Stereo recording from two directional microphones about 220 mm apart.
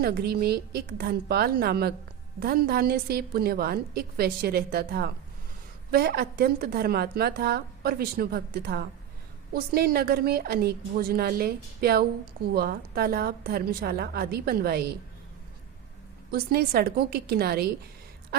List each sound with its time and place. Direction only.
0.0 s a woman's voice: 45° right (ahead or behind)
16.3 s a woman's voice: 45° right (ahead or behind)